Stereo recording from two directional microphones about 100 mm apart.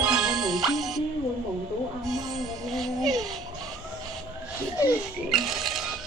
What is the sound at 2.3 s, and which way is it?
Music, centre (ahead or behind).